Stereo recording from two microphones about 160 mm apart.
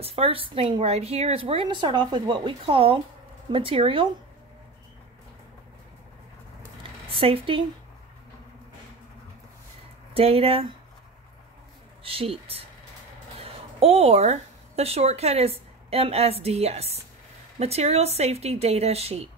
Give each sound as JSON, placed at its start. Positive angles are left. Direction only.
{"t": 0.0, "sound": "speech", "side_deg": -35}
{"t": 7.1, "sound": "speech", "side_deg": -35}
{"t": 10.1, "sound": "speech", "side_deg": -40}
{"t": 12.0, "sound": "a woman's voice", "side_deg": -35}